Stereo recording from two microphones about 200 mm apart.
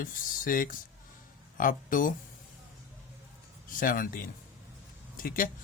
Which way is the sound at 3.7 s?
45° left (ahead or behind).